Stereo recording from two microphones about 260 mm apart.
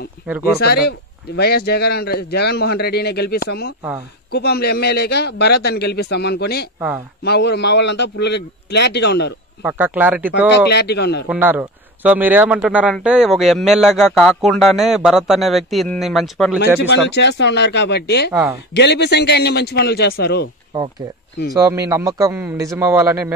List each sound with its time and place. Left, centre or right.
0.6 s a man's voice: left
9.6 s a man's voice: centre
10.7 s a man's voice: left
11.2 s a man's voice: centre
16.5 s a man's voice: left
18.3 s speech: centre
18.7 s a man's voice: left
21.5 s a man's voice: centre